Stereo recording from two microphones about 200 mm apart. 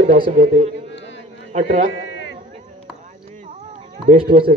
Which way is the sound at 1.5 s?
40° right (ahead or behind).